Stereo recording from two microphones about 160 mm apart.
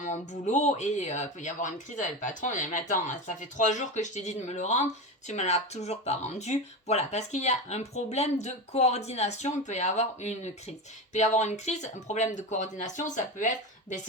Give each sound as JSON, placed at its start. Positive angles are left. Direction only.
{"t": 0.0, "sound": "speech", "side_deg": 50}